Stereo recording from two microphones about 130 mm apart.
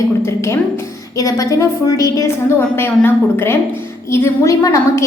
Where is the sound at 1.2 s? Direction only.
25° left (ahead or behind).